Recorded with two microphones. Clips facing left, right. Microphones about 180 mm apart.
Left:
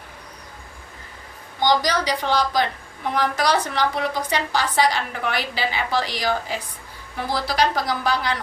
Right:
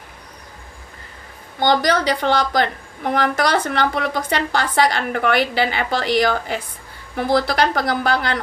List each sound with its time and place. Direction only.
1.6 s a woman's voice: 55° right (ahead or behind)